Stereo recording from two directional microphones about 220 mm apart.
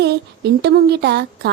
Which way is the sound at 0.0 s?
50° right (ahead or behind).